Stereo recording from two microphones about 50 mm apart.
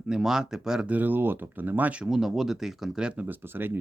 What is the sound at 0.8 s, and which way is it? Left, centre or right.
Speech, right.